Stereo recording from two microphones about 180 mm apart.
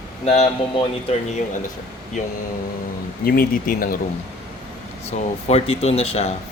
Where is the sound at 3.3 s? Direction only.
50° left (ahead or behind).